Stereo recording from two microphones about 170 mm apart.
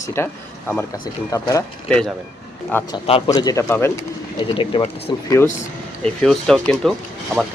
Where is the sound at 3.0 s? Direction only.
35° left (ahead or behind).